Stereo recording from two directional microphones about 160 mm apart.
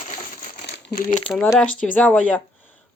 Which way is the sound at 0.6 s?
90° left.